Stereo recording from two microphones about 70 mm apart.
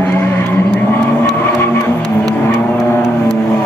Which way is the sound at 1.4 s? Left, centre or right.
Left.